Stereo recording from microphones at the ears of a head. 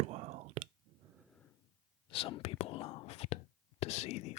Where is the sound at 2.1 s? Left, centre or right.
Left.